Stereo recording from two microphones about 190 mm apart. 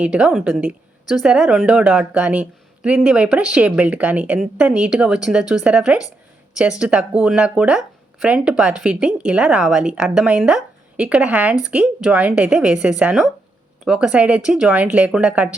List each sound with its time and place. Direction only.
0.0 s a woman's voice: 5° right (ahead or behind)